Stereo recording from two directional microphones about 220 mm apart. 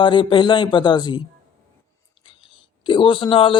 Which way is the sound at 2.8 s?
20° left (ahead or behind).